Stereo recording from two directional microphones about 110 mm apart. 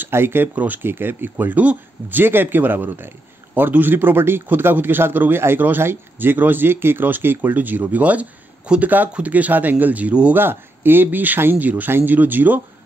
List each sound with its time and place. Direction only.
0.0 s a man's voice: 20° right (ahead or behind)